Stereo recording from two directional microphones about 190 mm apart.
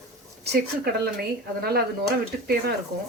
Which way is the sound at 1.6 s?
55° right (ahead or behind).